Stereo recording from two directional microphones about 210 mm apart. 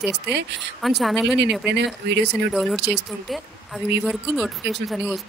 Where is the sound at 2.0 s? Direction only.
55° right (ahead or behind).